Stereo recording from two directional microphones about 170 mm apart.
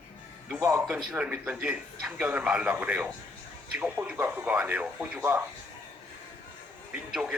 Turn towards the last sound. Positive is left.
turn(degrees=-5)  # may be behind; listen again after turning